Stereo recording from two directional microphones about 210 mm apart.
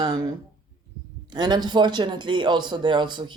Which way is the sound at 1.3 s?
20° right (ahead or behind).